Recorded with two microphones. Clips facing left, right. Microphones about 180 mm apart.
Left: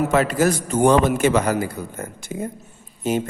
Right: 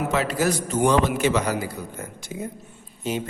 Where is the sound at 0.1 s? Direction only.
50° left (ahead or behind).